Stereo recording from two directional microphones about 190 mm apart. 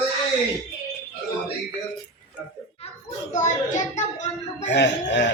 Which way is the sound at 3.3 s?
40° left (ahead or behind).